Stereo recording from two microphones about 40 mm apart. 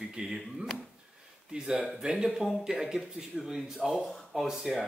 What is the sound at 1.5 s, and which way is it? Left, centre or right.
Speech, centre.